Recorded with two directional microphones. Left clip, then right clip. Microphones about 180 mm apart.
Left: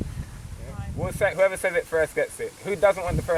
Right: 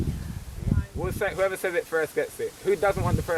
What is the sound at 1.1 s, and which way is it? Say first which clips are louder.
Speech: left 5 dB; 15° right (ahead or behind).